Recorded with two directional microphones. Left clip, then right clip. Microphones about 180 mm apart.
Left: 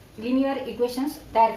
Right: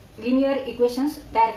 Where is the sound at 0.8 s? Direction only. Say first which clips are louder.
Right 4 dB; 40° left (ahead or behind).